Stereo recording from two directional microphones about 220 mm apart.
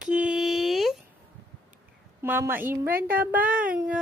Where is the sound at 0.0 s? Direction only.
5° right (ahead or behind).